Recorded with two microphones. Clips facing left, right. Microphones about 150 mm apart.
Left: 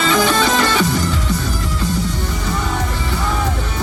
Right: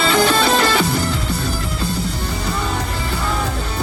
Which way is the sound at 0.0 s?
35° right (ahead or behind).